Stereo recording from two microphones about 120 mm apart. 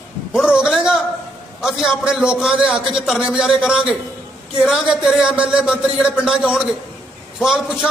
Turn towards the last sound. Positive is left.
turn(degrees=-5)  # may be behind; listen again after turning